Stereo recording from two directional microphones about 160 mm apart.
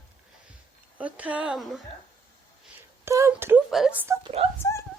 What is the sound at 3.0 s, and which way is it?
Speech, 15° right (ahead or behind).